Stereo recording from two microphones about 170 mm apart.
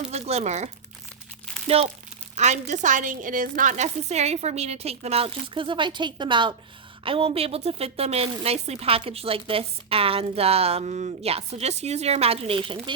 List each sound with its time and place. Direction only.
0.1 s speech: 40° right (ahead or behind)